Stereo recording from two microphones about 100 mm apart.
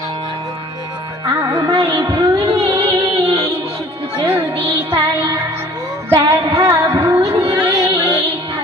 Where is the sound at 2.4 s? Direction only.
70° right (ahead or behind).